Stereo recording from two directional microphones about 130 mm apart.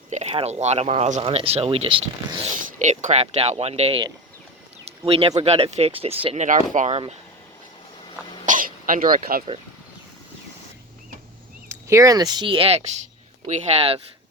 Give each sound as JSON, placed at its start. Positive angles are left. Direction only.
{"t": 0.1, "sound": "speech", "side_deg": -55}
{"t": 1.2, "sound": "speech", "side_deg": -45}
{"t": 2.7, "sound": "speech", "side_deg": -70}
{"t": 8.4, "sound": "throat clearing", "side_deg": -90}
{"t": 11.7, "sound": "speech", "side_deg": -25}